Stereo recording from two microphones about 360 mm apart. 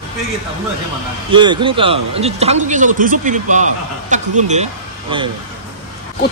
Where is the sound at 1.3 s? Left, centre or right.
Centre.